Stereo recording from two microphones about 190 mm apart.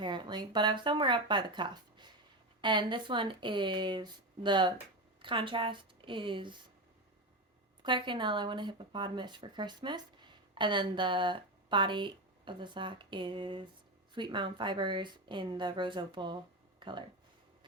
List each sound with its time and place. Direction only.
0.0 s speech: 25° right (ahead or behind)
7.8 s speech: 25° right (ahead or behind)